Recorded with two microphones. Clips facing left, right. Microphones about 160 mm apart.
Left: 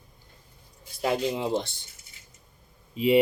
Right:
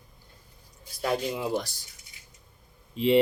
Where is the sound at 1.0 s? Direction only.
25° left (ahead or behind).